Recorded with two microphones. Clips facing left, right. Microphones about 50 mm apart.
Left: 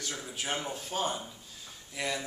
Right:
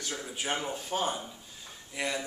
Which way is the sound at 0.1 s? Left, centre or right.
Centre.